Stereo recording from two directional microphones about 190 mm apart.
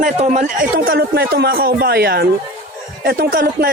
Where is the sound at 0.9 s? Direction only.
55° right (ahead or behind).